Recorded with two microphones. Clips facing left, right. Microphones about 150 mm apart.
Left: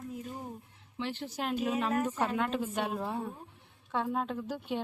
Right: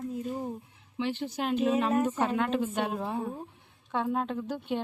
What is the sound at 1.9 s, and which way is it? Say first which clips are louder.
Speech: right 4 dB; 20° right (ahead or behind).